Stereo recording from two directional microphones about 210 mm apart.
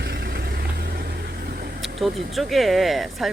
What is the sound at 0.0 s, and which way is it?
Vehicle, 45° right (ahead or behind).